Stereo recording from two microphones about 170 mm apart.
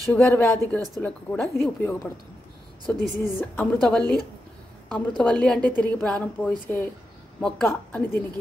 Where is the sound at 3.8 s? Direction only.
5° left (ahead or behind).